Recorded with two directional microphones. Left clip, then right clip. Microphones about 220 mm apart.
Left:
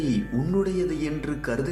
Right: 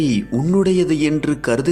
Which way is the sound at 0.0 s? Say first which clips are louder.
Right 7 dB; 40° right (ahead or behind).